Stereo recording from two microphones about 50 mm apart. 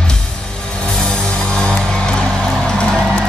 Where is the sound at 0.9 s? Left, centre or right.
Centre.